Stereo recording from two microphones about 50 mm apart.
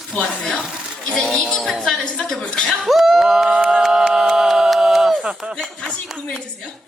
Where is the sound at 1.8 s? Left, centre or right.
Centre.